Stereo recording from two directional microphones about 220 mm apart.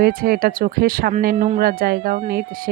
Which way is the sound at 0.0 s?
40° right (ahead or behind).